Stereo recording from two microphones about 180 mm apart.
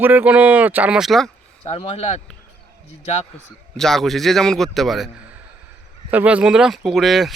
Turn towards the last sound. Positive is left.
turn(degrees=0)  # may be behind; listen again after turning